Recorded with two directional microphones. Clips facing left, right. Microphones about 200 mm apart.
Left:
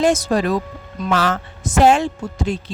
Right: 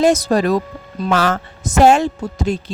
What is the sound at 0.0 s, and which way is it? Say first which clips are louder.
Speech: right 3 dB; 40° right (ahead or behind).